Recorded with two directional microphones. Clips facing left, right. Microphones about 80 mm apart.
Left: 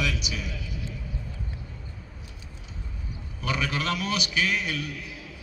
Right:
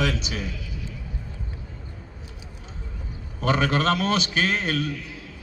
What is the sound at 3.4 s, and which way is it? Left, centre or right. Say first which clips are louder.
A man's voice: right 7 dB; right.